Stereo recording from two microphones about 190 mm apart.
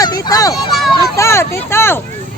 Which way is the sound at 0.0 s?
20° left (ahead or behind).